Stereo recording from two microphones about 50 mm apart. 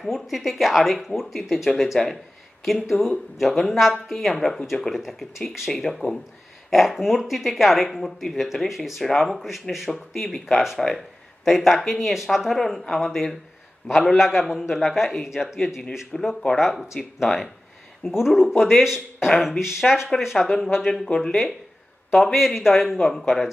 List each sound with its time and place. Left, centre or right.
0.0 s speech: centre
11.0 s a sound: centre
11.8 s speech: centre
16.1 s speech: centre
18.0 s speech: centre
19.2 s speech: centre
19.6 s speech: centre
20.3 s speech: centre
22.1 s speech: centre